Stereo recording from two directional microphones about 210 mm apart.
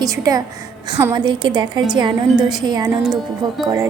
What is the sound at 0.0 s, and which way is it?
A woman's voice, 15° right (ahead or behind).